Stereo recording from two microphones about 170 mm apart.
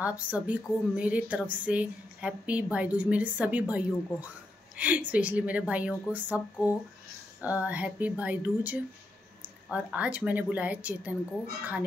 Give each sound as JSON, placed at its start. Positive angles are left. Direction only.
{"t": 0.0, "sound": "a woman's voice", "side_deg": -10}